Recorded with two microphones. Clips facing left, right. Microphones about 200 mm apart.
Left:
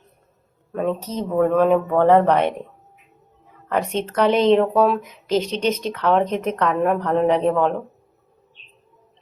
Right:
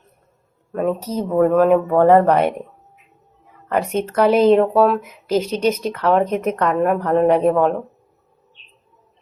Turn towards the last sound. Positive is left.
turn(degrees=-5)  # may be behind; listen again after turning